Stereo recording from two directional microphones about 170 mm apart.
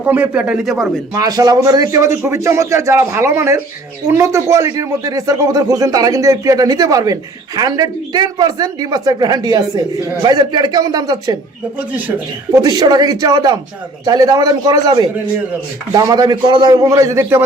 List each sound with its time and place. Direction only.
0.0 s speech: 10° right (ahead or behind)
1.1 s a man's voice: 20° right (ahead or behind)
11.8 s a man's voice: 10° right (ahead or behind)
12.5 s a man's voice: 25° right (ahead or behind)